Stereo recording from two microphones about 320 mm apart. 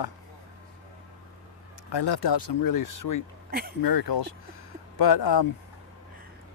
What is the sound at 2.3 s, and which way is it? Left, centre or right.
Speech, left.